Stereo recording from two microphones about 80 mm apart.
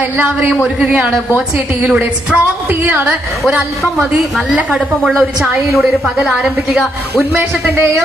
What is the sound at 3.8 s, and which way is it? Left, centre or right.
A woman's voice, centre.